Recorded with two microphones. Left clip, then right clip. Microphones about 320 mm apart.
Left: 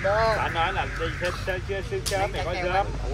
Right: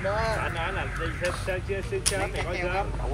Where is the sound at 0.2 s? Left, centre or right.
Centre.